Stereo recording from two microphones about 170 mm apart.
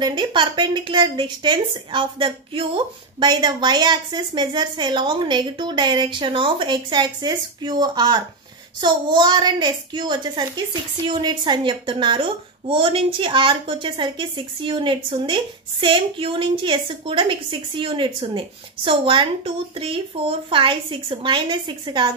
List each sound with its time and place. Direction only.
0.0 s a woman's voice: 25° right (ahead or behind)